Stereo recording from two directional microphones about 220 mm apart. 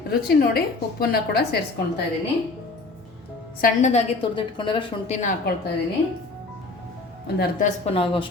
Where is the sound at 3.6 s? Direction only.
30° left (ahead or behind).